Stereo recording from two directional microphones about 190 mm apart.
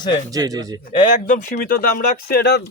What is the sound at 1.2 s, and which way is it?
Speech, 45° left (ahead or behind).